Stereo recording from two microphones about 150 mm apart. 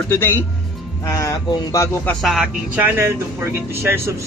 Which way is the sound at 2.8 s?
15° right (ahead or behind).